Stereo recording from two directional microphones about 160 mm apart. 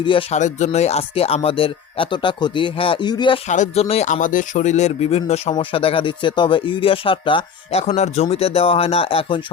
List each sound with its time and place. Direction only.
0.0 s speech: 35° left (ahead or behind)
0.3 s speech: 50° left (ahead or behind); by 3.4 s 30° left (ahead or behind)
3.4 s speech: 45° left (ahead or behind)